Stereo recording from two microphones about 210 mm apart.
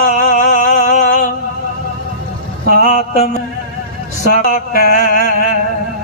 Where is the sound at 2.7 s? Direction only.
35° left (ahead or behind).